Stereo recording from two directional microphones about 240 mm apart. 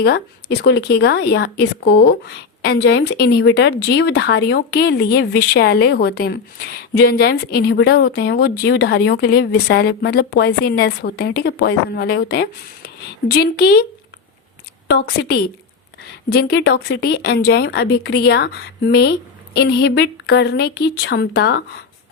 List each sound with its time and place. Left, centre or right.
0.0 s speech: left
14.8 s a woman's voice: left